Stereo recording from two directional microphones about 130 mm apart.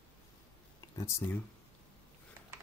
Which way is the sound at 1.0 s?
15° left (ahead or behind).